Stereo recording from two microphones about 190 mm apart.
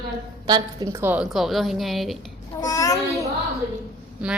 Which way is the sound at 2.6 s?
20° left (ahead or behind).